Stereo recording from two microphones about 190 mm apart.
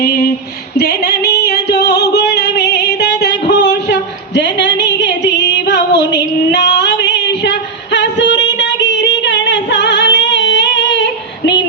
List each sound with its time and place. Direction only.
0.8 s music: 60° left (ahead or behind)
4.4 s a sound: 70° left (ahead or behind)
4.8 s music: 70° left (ahead or behind)
6.5 s female singing: 65° left (ahead or behind)